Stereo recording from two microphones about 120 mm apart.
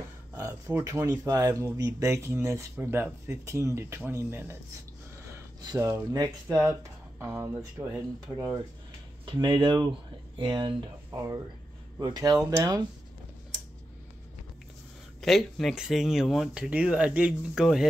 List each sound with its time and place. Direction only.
0.4 s speech: 25° right (ahead or behind)
5.6 s speech: 30° right (ahead or behind); by 8.0 s 15° right (ahead or behind)
9.2 s speech: 45° right (ahead or behind)
11.1 s speech: 25° right (ahead or behind)
15.2 s speech: centre (ahead or behind)